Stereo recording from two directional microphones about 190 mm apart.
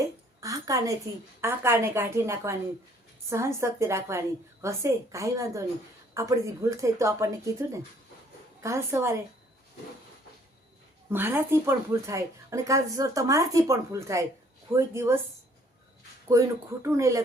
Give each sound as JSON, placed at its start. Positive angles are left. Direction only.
{"t": 0.0, "sound": "a sound", "side_deg": -15}
{"t": 1.4, "sound": "a woman's voice", "side_deg": -15}
{"t": 11.1, "sound": "a woman's voice", "side_deg": -10}
{"t": 16.8, "sound": "a woman's voice", "side_deg": -15}